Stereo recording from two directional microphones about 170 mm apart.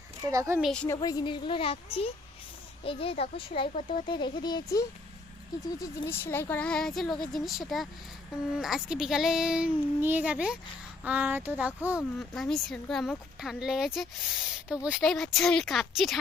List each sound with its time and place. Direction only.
0.3 s a woman's voice: 20° right (ahead or behind)
0.6 s speech: 5° left (ahead or behind)
0.9 s a woman's voice: 20° left (ahead or behind)
6.1 s speech: 15° left (ahead or behind)